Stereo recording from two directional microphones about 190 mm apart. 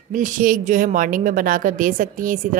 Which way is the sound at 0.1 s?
45° right (ahead or behind).